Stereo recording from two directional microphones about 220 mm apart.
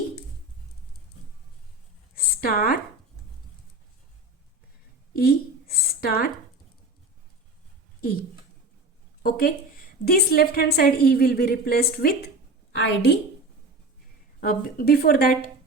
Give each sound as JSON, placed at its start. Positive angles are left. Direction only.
{"t": 2.4, "sound": "a woman's voice", "side_deg": 40}
{"t": 5.1, "sound": "a sound", "side_deg": 45}
{"t": 9.2, "sound": "a woman's voice", "side_deg": 40}
{"t": 14.4, "sound": "a woman's voice", "side_deg": 40}